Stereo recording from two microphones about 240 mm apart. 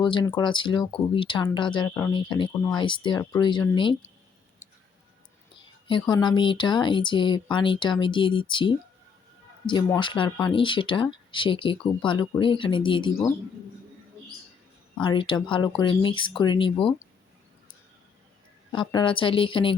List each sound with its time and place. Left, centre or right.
0.0 s speech: centre
5.9 s speech: centre
15.0 s speech: left
18.7 s speech: centre